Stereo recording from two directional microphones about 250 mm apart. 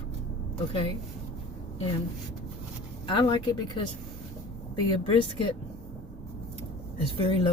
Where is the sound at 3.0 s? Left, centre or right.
Centre.